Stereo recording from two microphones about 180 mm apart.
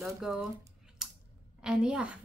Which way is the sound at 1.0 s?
5° right (ahead or behind).